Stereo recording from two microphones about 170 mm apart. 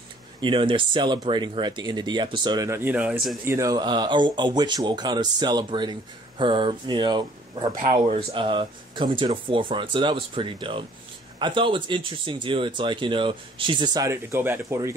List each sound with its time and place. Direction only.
0.4 s speech: 30° right (ahead or behind); by 3.3 s 5° right (ahead or behind)
3.4 s speech: 20° right (ahead or behind)